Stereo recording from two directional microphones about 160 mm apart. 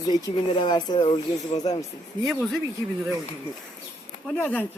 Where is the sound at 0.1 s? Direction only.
25° left (ahead or behind).